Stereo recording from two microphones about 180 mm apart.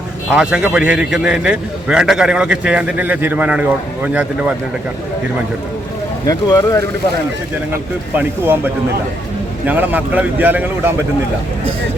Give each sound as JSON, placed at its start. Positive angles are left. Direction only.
{"t": 0.3, "sound": "a man's voice", "side_deg": -5}
{"t": 6.2, "sound": "speech", "side_deg": 20}
{"t": 7.7, "sound": "a man's voice", "side_deg": -10}